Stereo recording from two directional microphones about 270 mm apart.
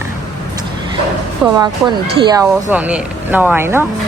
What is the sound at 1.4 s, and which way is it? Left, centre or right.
Speech, centre.